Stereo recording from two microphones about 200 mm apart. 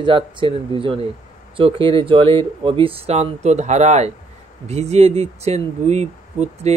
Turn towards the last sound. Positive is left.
turn(degrees=-35)  # may be behind; listen again after turning